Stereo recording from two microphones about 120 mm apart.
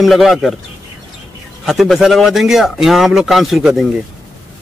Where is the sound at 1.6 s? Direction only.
Centre (ahead or behind).